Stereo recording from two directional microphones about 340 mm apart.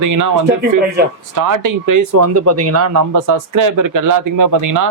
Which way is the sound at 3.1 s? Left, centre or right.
Right.